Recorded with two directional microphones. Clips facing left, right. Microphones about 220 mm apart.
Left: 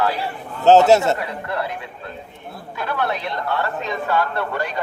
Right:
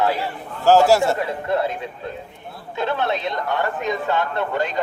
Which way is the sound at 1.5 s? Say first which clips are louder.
Right 5 dB; 20° right (ahead or behind).